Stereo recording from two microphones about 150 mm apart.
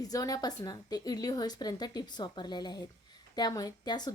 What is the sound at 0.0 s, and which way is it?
A woman's voice, 25° left (ahead or behind).